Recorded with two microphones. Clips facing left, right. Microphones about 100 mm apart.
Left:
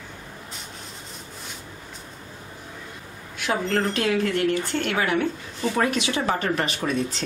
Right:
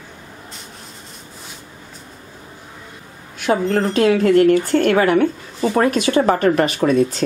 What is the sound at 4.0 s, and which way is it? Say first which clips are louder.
A woman's voice: right 10 dB; 45° right (ahead or behind).